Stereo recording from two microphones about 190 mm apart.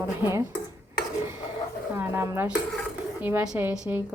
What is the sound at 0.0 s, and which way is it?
Speech, 15° right (ahead or behind).